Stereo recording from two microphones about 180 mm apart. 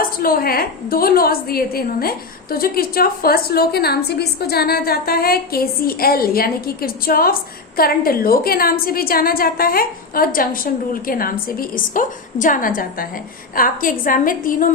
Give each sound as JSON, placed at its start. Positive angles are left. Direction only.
{"t": 0.0, "sound": "a woman's voice", "side_deg": 55}